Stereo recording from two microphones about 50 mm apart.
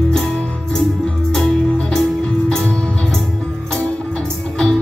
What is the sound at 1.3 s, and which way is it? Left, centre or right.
Music, centre.